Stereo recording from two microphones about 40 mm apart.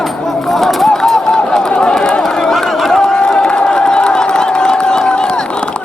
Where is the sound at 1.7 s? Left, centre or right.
Left.